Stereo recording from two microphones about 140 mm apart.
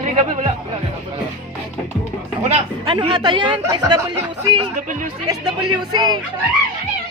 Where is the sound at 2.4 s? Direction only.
40° right (ahead or behind).